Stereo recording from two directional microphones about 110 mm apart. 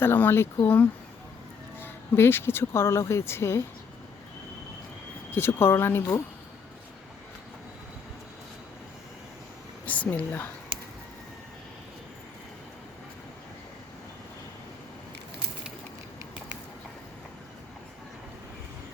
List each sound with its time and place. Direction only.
0.0 s a woman's voice: 20° left (ahead or behind)
5.3 s speech: 20° left (ahead or behind)
9.8 s a woman's voice: 15° left (ahead or behind)
10.7 s a sound: 50° right (ahead or behind)